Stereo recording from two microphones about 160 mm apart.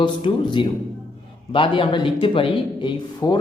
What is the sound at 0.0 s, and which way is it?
Speech, 30° left (ahead or behind).